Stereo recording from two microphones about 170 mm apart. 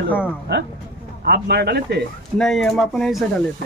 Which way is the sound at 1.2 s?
75° right (ahead or behind).